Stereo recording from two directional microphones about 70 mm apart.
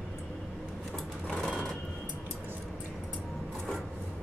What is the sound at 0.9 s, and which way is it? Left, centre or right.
Sewing machine, centre.